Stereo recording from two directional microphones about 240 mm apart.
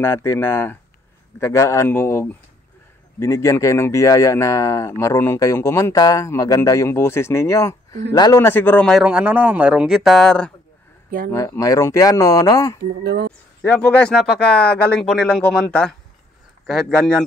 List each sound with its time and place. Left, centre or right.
0.0 s a man's voice: centre
13.0 s speech: right
13.6 s a man's voice: centre